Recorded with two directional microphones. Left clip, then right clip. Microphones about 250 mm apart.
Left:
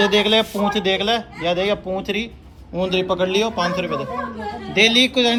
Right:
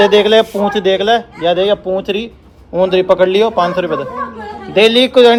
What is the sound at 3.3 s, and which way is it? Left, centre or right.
A man's voice, centre.